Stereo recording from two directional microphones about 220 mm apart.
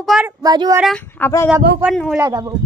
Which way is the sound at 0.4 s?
15° right (ahead or behind).